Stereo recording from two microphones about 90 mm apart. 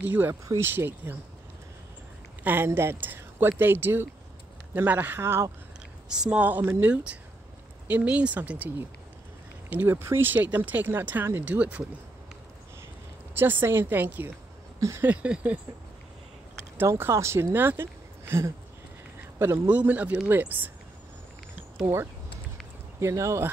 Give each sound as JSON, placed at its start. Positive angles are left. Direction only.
{"t": 0.0, "sound": "speech", "side_deg": -20}
{"t": 2.4, "sound": "speech", "side_deg": -25}
{"t": 6.0, "sound": "a woman's voice", "side_deg": -10}
{"t": 6.4, "sound": "speech", "side_deg": -20}
{"t": 7.9, "sound": "speech", "side_deg": -15}
{"t": 9.7, "sound": "speech", "side_deg": -20}
{"t": 13.3, "sound": "speech", "side_deg": -25}
{"t": 14.8, "sound": "a sound", "side_deg": -35}
{"t": 15.0, "sound": "speech", "side_deg": -15}
{"t": 16.7, "sound": "speech", "side_deg": -30}
{"t": 19.7, "sound": "speech", "side_deg": -20}
{"t": 21.8, "sound": "speech", "side_deg": -30}